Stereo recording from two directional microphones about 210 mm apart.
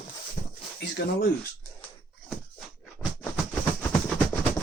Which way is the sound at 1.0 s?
50° left (ahead or behind).